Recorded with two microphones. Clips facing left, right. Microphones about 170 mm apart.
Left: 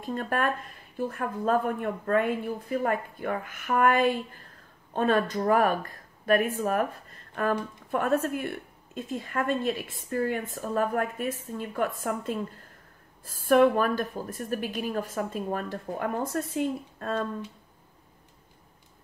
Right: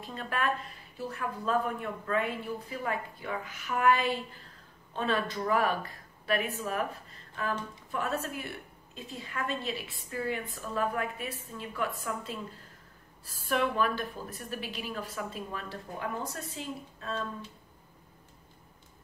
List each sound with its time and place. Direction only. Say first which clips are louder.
0.0 s a woman's voice: left 5 dB; 50° left (ahead or behind)